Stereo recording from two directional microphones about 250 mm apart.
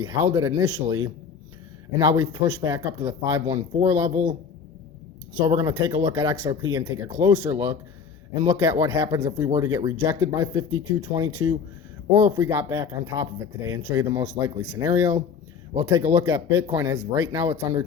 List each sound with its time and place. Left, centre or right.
0.0 s speech: centre
5.5 s speech: centre